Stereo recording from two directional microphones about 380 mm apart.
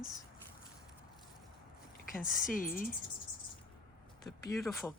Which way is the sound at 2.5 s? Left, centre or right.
Left.